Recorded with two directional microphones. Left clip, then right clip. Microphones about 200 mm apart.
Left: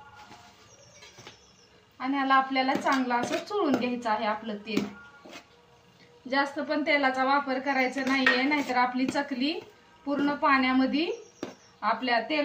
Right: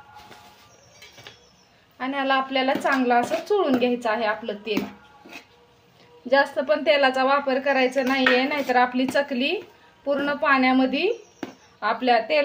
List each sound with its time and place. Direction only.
2.0 s a woman's voice: 55° right (ahead or behind)
6.2 s a woman's voice: 50° right (ahead or behind)